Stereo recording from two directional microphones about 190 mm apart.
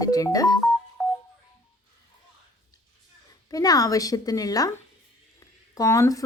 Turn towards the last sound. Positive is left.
turn(degrees=15)  # may be behind; listen again after turning